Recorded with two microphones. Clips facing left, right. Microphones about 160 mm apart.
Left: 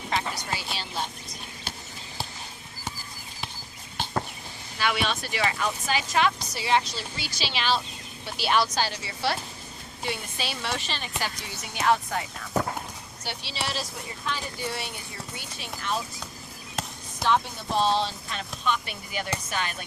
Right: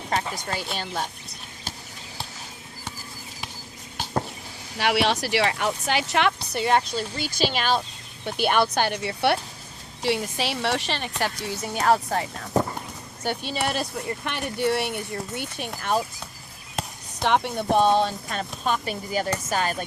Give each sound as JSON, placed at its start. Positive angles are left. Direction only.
{"t": 0.1, "sound": "speech", "side_deg": -45}
{"t": 4.8, "sound": "a woman's voice", "side_deg": -75}
{"t": 10.0, "sound": "a woman's voice", "side_deg": -80}
{"t": 11.7, "sound": "speech", "side_deg": -40}
{"t": 13.2, "sound": "speech", "side_deg": -50}
{"t": 14.3, "sound": "speech", "side_deg": -65}
{"t": 17.2, "sound": "speech", "side_deg": -65}